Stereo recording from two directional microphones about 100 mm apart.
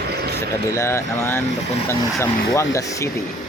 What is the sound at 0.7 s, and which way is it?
Speech, 30° left (ahead or behind).